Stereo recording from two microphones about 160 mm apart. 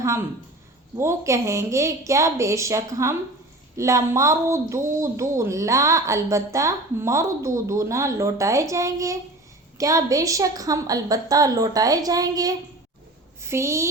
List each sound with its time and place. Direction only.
0.0 s a woman's voice: 20° right (ahead or behind)